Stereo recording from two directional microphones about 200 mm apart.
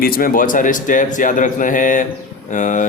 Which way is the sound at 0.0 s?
45° left (ahead or behind).